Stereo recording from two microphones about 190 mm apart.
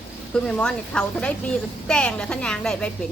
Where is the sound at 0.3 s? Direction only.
5° left (ahead or behind).